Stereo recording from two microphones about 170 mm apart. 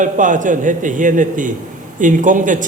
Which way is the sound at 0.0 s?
50° right (ahead or behind).